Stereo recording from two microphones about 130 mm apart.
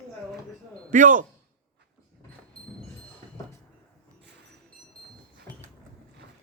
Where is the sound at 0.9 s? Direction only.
90° right.